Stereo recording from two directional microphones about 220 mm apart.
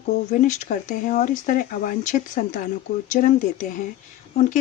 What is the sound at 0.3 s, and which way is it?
Speech, 35° left (ahead or behind).